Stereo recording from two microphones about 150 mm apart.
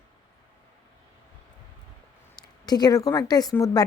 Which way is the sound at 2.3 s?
25° left (ahead or behind).